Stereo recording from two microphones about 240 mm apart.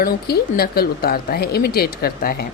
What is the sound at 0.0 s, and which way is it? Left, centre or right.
A woman's voice, left.